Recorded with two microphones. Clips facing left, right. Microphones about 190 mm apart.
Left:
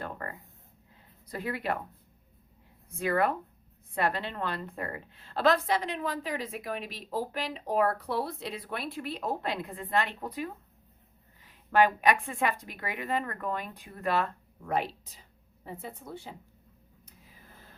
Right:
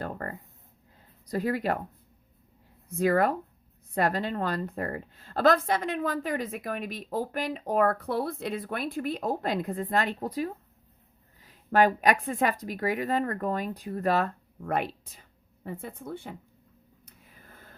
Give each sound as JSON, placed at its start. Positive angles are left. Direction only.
{"t": 1.3, "sound": "speech", "side_deg": -40}
{"t": 3.0, "sound": "a woman's voice", "side_deg": -40}
{"t": 14.7, "sound": "a woman's voice", "side_deg": -55}